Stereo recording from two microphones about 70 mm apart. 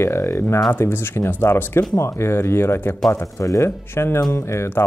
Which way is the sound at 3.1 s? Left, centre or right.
Left.